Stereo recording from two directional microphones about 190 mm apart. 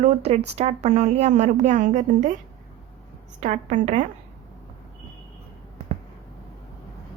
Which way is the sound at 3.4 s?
40° right (ahead or behind).